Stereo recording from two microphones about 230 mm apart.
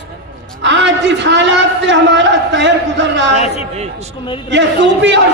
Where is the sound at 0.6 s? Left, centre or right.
Right.